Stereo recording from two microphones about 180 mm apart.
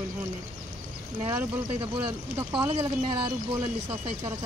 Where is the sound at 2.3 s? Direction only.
20° right (ahead or behind).